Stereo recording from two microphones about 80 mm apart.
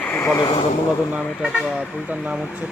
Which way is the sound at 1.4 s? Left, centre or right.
Centre.